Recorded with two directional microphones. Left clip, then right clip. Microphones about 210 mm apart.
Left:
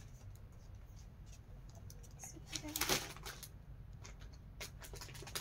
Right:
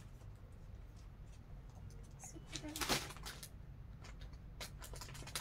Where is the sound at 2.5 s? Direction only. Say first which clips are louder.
Left 3 dB; 30° left (ahead or behind).